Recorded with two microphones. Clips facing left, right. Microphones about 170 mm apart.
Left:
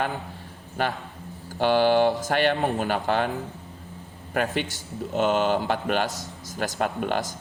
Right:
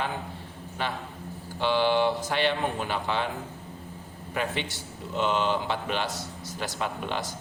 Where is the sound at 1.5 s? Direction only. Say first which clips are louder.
Left 4 dB; 45° left (ahead or behind).